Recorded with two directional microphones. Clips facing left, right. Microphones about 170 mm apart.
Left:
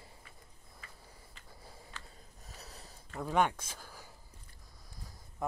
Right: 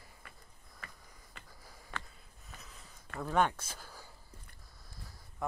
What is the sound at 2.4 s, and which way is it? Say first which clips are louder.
Snort: left 2 dB; 35° left (ahead or behind).